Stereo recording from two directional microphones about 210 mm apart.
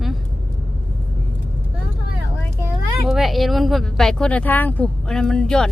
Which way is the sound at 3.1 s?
Centre (ahead or behind).